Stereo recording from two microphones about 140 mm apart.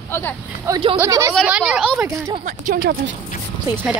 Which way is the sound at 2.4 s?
80° right.